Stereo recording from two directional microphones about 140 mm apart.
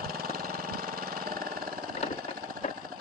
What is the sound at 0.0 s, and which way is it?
Engine, 90° right.